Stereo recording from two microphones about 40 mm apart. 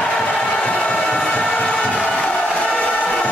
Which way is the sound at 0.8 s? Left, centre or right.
Left.